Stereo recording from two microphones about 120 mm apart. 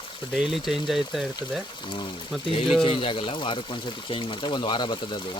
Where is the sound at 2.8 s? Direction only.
45° left (ahead or behind).